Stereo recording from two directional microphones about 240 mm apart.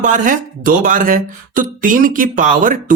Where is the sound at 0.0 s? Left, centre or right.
Right.